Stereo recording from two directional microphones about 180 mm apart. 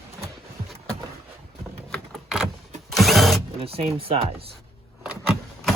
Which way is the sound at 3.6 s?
30° right (ahead or behind).